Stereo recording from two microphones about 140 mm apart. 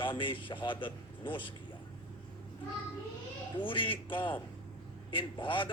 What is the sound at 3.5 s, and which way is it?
A man's voice, 35° left (ahead or behind).